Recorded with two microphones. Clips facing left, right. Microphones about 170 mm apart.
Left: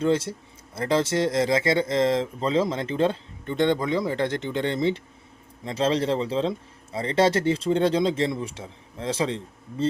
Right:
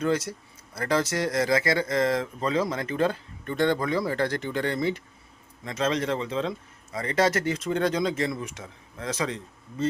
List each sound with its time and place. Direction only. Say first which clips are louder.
0.0 s speech: left 3 dB; 25° left (ahead or behind)